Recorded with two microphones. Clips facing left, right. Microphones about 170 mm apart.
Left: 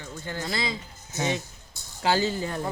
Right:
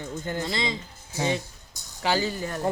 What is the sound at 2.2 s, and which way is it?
Speech, 20° left (ahead or behind).